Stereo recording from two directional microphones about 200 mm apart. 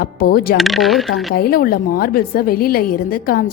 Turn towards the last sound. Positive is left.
turn(degrees=45)  # may be behind; listen again after turning